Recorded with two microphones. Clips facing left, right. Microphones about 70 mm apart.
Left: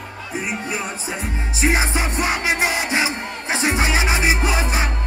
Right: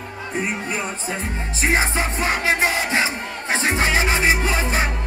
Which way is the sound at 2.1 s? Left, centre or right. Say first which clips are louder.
Even; centre.